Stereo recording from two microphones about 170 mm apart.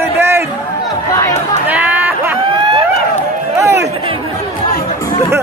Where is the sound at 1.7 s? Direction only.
10° right (ahead or behind).